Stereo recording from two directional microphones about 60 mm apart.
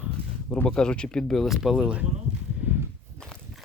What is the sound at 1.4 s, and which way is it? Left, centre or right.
Speech, centre.